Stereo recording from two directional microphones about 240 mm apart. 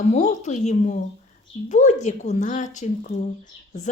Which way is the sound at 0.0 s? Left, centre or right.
Left.